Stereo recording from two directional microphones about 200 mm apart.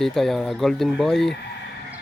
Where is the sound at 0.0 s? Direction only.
Centre (ahead or behind).